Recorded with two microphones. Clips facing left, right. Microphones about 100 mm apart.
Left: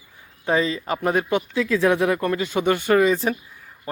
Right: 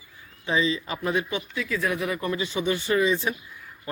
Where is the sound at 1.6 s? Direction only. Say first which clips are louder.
Left 8 dB; 90° left.